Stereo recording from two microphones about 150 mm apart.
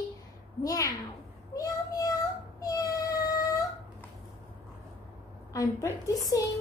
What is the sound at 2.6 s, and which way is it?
Cat, 25° left (ahead or behind).